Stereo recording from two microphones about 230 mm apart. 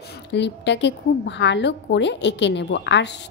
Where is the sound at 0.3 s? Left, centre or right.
Left.